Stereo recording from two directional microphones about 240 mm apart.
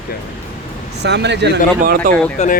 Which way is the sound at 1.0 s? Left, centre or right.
Right.